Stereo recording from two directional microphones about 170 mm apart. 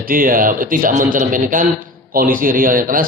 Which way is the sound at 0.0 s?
55° right (ahead or behind).